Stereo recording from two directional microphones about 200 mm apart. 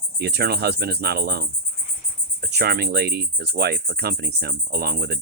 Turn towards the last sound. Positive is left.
turn(degrees=-50)  # may be behind; listen again after turning